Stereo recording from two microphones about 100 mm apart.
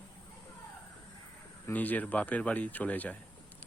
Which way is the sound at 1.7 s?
15° left (ahead or behind).